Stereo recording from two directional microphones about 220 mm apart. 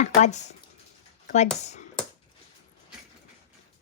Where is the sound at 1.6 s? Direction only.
30° left (ahead or behind).